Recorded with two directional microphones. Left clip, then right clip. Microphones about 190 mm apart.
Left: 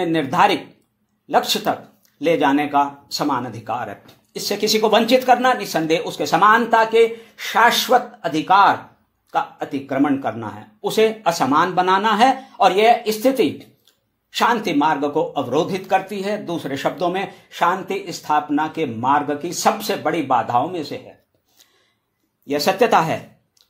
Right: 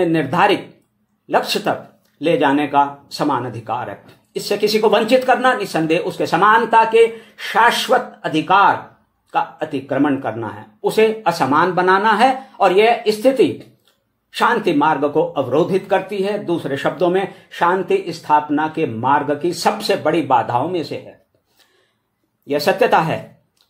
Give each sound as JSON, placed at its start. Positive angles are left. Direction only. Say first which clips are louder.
{"t": 0.0, "sound": "speech", "louder": "right 1 dB", "side_deg": 25}
{"t": 22.5, "sound": "speech", "louder": "right 1 dB", "side_deg": 30}